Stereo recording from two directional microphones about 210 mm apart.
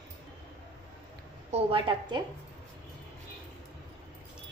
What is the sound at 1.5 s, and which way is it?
Speech, 25° right (ahead or behind).